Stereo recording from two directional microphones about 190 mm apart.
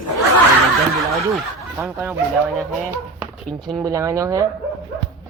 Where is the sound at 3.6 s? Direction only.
20° right (ahead or behind).